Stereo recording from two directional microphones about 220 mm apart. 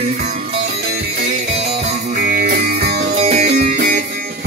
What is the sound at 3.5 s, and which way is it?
Music, 45° right (ahead or behind).